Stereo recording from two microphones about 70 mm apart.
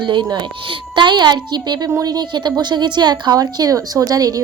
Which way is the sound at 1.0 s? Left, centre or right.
Right.